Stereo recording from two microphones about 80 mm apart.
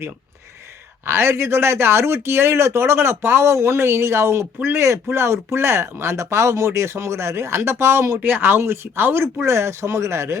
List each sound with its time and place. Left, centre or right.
1.0 s speech: right
8.2 s speech: right